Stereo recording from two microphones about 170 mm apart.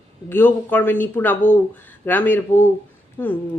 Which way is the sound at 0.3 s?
10° left (ahead or behind).